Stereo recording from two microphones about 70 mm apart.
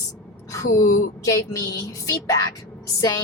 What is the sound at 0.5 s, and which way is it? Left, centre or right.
A woman's voice, left.